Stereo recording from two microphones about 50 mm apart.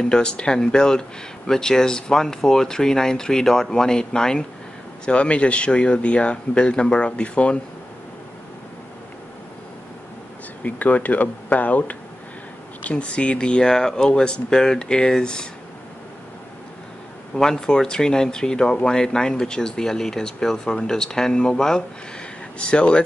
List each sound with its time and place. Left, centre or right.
0.0 s speech: centre
10.6 s speech: left; by 15.4 s centre
17.4 s speech: centre